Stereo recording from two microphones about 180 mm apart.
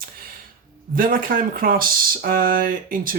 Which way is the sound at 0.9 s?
50° right (ahead or behind).